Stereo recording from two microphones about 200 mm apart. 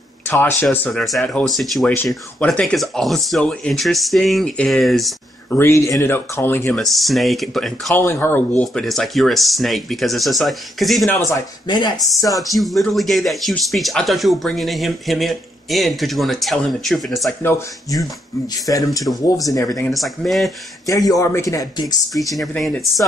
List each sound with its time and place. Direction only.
0.3 s speech: 10° left (ahead or behind)
5.5 s speech: 10° left (ahead or behind)
11.1 s speech: 15° left (ahead or behind)
12.4 s speech: centre (ahead or behind)
17.4 s speech: 10° left (ahead or behind)
19.9 s speech: centre (ahead or behind)
20.8 s speech: 15° left (ahead or behind)
22.3 s speech: centre (ahead or behind)